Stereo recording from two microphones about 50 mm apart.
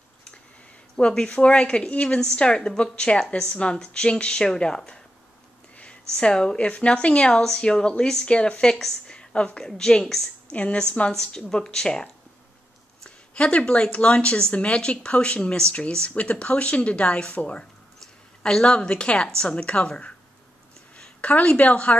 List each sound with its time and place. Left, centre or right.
0.9 s speech: centre
2.0 s a woman's voice: centre
6.0 s a woman's voice: centre
9.0 s a sound: centre
9.7 s a woman's voice: centre
10.5 s a woman's voice: left
13.0 s a sound: left
13.9 s a woman's voice: left